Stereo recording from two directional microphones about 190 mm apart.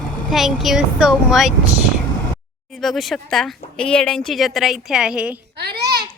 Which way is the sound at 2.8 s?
Centre (ahead or behind).